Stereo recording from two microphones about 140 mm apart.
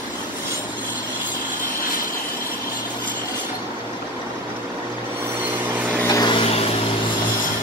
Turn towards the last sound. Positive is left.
turn(degrees=45)  # may be behind; listen again after turning